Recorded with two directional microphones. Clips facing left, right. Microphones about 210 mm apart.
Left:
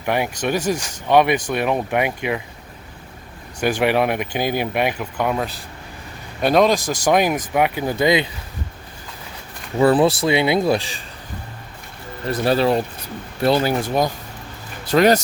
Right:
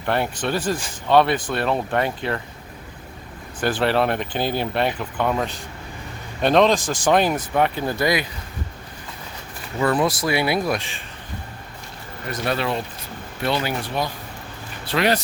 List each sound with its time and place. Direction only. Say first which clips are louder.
0.0 s speech: left 2 dB; 10° left (ahead or behind)
3.6 s speech: left 2 dB; 15° left (ahead or behind)
9.8 s speech: left 5 dB; 30° left (ahead or behind)
12.3 s speech: left 7 dB; 35° left (ahead or behind)